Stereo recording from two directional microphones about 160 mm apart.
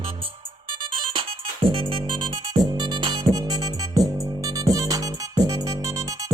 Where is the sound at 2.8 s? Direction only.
25° right (ahead or behind).